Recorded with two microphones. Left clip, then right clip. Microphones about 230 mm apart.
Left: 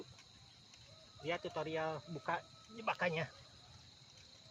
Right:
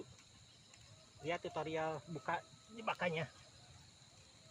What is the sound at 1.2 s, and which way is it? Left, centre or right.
Speech, centre.